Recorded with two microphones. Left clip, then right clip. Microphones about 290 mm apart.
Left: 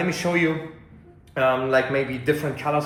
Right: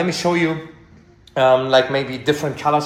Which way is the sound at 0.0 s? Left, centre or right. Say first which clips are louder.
Right 4 dB; centre.